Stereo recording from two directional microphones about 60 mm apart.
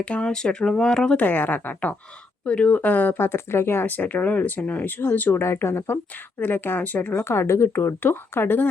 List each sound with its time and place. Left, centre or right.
0.0 s speech: centre
1.2 s speech: left
5.4 s speech: left
7.2 s speech: left
8.0 s speech: left